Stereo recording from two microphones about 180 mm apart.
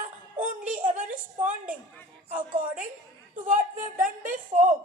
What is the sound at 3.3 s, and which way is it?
A woman's voice, 45° right (ahead or behind).